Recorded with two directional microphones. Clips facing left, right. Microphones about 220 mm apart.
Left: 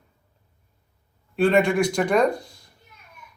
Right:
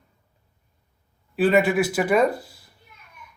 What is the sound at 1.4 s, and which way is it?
Speech, 5° right (ahead or behind).